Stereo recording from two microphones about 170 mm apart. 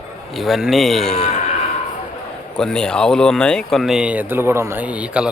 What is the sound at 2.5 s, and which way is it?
Speech, 5° left (ahead or behind).